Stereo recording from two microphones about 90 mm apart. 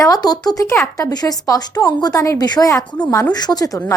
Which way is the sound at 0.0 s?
45° left (ahead or behind).